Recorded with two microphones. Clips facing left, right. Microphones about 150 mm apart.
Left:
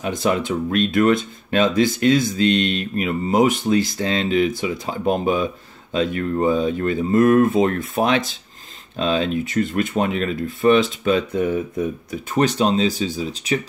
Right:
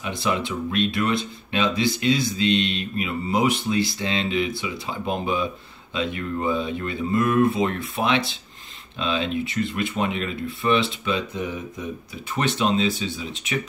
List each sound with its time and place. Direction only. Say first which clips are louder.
0.0 s speech: left 5 dB; 45° left (ahead or behind)